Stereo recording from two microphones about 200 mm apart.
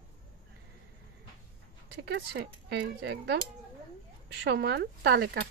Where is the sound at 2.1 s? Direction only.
55° right (ahead or behind).